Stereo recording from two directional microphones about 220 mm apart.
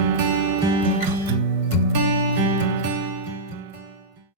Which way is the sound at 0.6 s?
20° right (ahead or behind).